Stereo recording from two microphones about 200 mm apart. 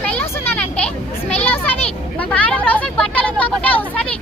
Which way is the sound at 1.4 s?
10° left (ahead or behind).